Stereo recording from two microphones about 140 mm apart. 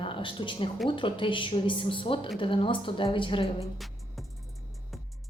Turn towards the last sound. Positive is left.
turn(degrees=0)  # may be behind; listen again after turning